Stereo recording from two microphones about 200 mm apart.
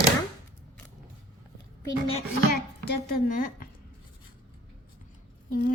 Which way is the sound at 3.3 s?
45° left (ahead or behind).